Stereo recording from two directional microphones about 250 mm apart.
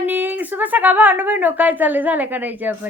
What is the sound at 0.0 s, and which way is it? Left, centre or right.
A woman's voice, centre.